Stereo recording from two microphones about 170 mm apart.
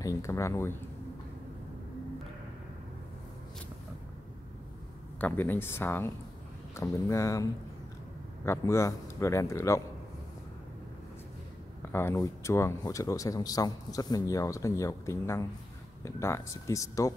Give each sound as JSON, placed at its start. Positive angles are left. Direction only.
{"t": 0.0, "sound": "speech", "side_deg": 20}
{"t": 5.2, "sound": "speech", "side_deg": 10}
{"t": 8.5, "sound": "speech", "side_deg": 15}
{"t": 11.9, "sound": "speech", "side_deg": 15}